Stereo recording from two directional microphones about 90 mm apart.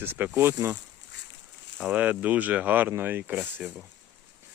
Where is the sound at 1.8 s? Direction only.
15° right (ahead or behind).